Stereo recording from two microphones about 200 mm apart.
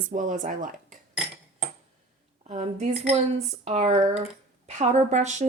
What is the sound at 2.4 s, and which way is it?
A woman's voice, 35° right (ahead or behind).